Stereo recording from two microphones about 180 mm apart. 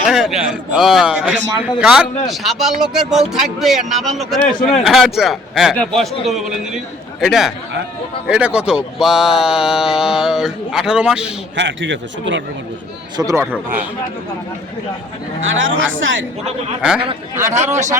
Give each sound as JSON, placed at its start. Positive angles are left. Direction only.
{"t": 0.1, "sound": "speech", "side_deg": 0}
{"t": 11.5, "sound": "a man's voice", "side_deg": -85}
{"t": 13.1, "sound": "speech", "side_deg": -15}
{"t": 15.4, "sound": "a man's voice", "side_deg": -90}
{"t": 17.5, "sound": "speech", "side_deg": -40}